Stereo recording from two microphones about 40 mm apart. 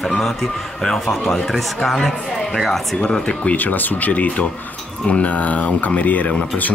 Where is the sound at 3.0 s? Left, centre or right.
Left.